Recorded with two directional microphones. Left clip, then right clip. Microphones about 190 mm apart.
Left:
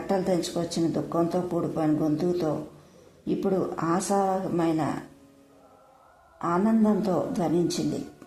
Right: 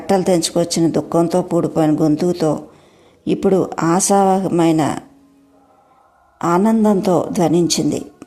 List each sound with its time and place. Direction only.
0.1 s speech: 30° right (ahead or behind)
6.4 s speech: 30° right (ahead or behind)